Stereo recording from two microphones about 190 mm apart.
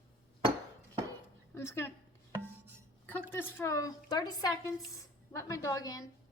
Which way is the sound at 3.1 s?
10° left (ahead or behind).